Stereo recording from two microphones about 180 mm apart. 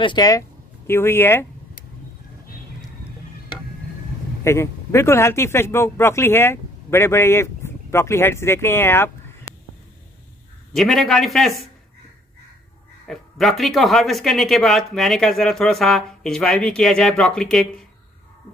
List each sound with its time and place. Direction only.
0.0 s speech: 20° left (ahead or behind)
4.5 s speech: 15° left (ahead or behind)
10.7 s speech: centre (ahead or behind)
13.1 s speech: centre (ahead or behind)